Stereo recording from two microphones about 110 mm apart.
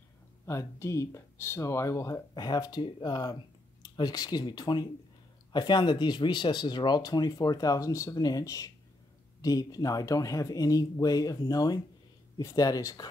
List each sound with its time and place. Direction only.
0.5 s speech: 25° left (ahead or behind)